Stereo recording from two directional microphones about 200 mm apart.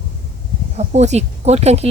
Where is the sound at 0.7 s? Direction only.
35° right (ahead or behind).